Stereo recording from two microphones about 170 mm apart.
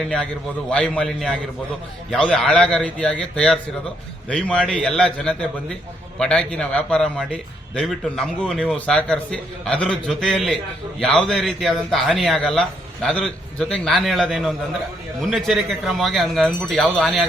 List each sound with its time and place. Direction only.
0.0 s a man's voice: 5° left (ahead or behind)